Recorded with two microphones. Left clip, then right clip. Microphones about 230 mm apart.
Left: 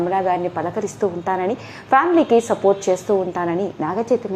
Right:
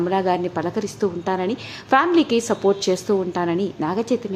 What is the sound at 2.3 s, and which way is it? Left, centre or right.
A woman's voice, centre.